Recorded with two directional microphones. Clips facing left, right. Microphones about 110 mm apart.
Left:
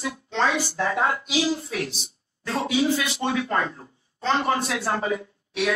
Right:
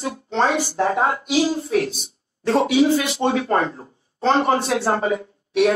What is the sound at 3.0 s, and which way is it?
A man's voice, 35° right (ahead or behind).